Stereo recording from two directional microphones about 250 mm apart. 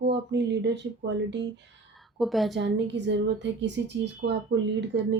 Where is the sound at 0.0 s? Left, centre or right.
Right.